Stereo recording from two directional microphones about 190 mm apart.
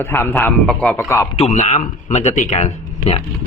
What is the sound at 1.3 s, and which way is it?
Speech, 35° left (ahead or behind).